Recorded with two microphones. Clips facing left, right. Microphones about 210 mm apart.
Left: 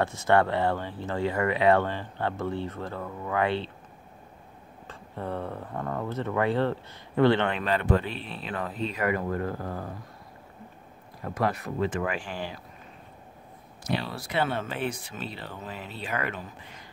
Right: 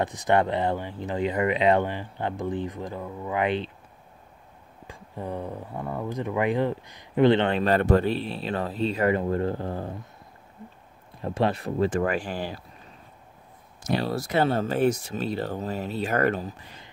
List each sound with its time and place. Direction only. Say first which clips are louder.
0.0 s speech: even; 15° right (ahead or behind)
4.8 s speech: even; 15° right (ahead or behind)
7.5 s speech: right 5 dB; 40° right (ahead or behind)
11.2 s speech: right 3 dB; 25° right (ahead or behind)
13.8 s speech: right 5 dB; 45° right (ahead or behind)